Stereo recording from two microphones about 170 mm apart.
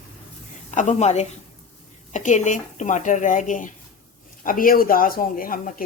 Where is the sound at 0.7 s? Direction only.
45° left (ahead or behind).